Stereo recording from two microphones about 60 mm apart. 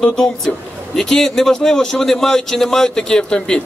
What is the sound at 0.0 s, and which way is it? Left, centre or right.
A man's voice, centre.